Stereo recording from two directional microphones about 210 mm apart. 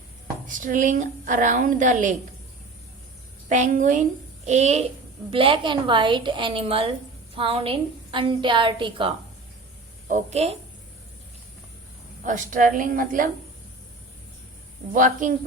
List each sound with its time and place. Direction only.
0.4 s a woman's voice: 40° right (ahead or behind)
3.5 s a woman's voice: 35° right (ahead or behind)
12.2 s a woman's voice: 40° right (ahead or behind)
14.9 s a woman's voice: 40° right (ahead or behind)